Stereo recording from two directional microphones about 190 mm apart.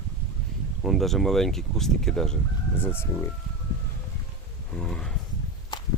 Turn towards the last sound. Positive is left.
turn(degrees=20)  # may be behind; listen again after turning